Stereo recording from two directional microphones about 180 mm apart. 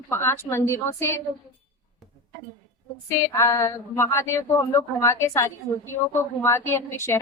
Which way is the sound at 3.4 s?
15° left (ahead or behind).